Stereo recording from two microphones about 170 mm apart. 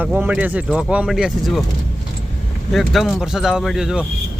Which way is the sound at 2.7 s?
Centre (ahead or behind).